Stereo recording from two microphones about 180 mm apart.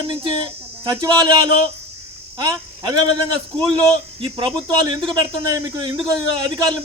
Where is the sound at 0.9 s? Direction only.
25° right (ahead or behind).